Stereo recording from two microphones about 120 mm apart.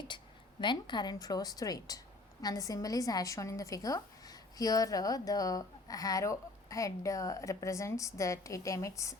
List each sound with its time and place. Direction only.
0.6 s a woman's voice: 40° left (ahead or behind)